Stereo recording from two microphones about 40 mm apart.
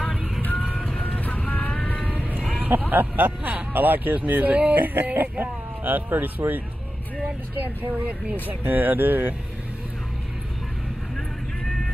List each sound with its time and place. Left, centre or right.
1.0 s music: left
2.0 s vehicle: left
2.6 s speech: right
8.5 s speech: right